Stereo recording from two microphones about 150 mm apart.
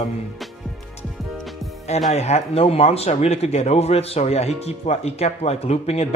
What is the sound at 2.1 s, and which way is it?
Speech, 45° left (ahead or behind).